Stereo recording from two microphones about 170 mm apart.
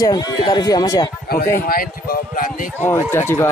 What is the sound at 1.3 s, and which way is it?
A man's voice, 60° left (ahead or behind).